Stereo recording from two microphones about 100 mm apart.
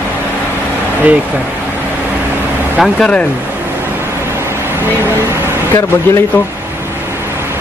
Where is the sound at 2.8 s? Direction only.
10° left (ahead or behind).